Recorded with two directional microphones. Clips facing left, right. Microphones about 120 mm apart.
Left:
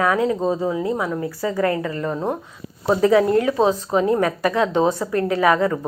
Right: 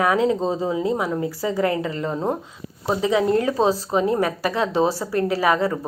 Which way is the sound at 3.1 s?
25° right (ahead or behind).